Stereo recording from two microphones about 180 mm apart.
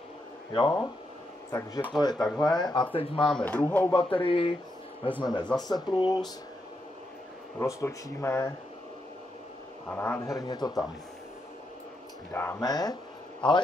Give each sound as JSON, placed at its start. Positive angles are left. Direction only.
{"t": 0.5, "sound": "speech", "side_deg": 25}
{"t": 3.3, "sound": "speech", "side_deg": 5}
{"t": 4.1, "sound": "speech", "side_deg": 30}
{"t": 7.5, "sound": "speech", "side_deg": 15}
{"t": 9.8, "sound": "speech", "side_deg": 10}
{"t": 12.3, "sound": "speech", "side_deg": 15}